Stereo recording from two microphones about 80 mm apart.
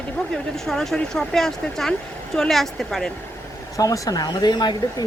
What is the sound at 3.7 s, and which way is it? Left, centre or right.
Speech, left.